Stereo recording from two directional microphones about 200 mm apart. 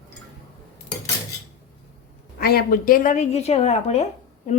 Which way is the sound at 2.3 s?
50° left (ahead or behind).